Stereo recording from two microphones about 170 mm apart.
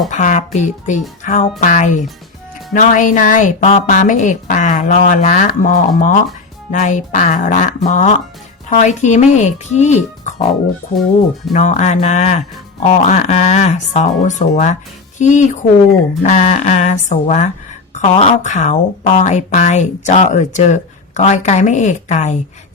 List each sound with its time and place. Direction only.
0.1 s speech: 45° left (ahead or behind)
11.5 s speech: 45° left (ahead or behind)